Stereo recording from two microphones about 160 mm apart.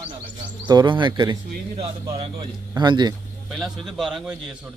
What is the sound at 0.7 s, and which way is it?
Speech, 25° right (ahead or behind).